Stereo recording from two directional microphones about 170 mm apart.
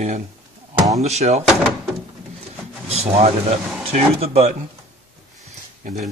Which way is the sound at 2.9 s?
40° right (ahead or behind).